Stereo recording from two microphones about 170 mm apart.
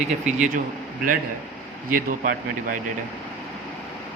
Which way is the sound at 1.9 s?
55° right (ahead or behind).